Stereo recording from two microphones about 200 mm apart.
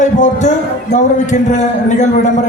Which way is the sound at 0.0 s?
35° left (ahead or behind).